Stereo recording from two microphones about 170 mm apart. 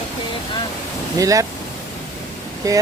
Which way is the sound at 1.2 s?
20° right (ahead or behind).